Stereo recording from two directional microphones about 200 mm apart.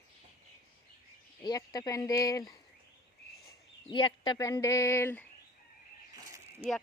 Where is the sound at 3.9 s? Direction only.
25° left (ahead or behind).